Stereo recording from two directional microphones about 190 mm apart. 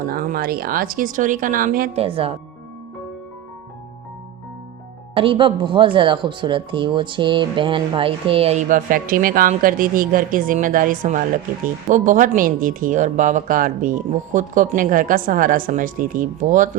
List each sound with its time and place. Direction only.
0.0 s speech: 50° right (ahead or behind)
2.0 s speech: 30° right (ahead or behind)
5.1 s speech: 30° right (ahead or behind); by 16.6 s 45° right (ahead or behind)